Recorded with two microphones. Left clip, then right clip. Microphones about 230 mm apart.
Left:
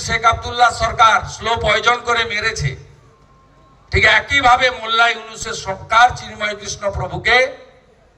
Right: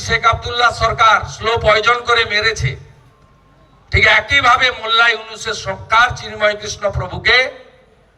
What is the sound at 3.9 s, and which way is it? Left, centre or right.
A man's voice, left.